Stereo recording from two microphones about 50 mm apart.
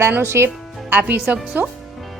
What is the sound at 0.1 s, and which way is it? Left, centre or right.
Speech, right.